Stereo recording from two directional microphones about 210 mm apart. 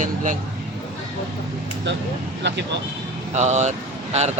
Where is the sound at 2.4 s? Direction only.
55° right (ahead or behind).